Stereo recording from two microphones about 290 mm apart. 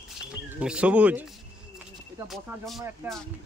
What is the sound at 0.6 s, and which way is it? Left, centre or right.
Speech, centre.